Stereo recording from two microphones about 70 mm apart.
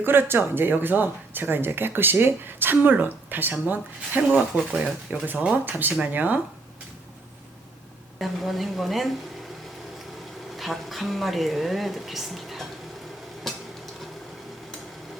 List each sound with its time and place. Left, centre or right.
0.0 s speech: right
8.2 s speech: centre
10.6 s speech: centre
13.5 s a sound: centre